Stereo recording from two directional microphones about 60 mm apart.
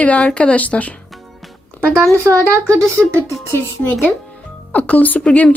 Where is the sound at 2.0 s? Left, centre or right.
Right.